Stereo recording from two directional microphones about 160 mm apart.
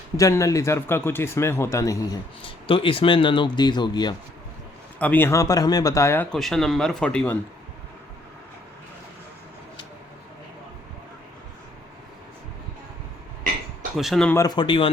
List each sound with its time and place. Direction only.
0.2 s speech: 20° left (ahead or behind)
2.4 s speech: 35° left (ahead or behind)
4.9 s speech: 10° left (ahead or behind)
6.3 s speech: centre (ahead or behind)
13.9 s speech: centre (ahead or behind)
14.3 s speech: 25° left (ahead or behind)